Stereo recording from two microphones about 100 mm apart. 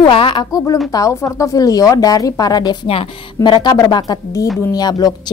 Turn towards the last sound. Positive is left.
turn(degrees=40)  # may be behind; listen again after turning